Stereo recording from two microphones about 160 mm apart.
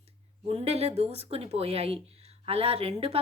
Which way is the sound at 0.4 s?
40° right (ahead or behind).